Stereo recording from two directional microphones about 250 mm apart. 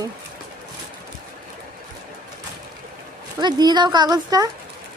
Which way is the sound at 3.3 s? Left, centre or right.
Centre.